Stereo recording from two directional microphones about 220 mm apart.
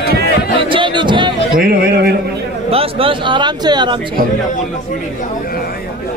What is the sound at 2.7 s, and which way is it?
Speech, 25° right (ahead or behind).